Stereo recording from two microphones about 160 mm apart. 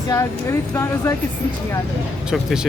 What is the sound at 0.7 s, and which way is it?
Speech, 20° left (ahead or behind).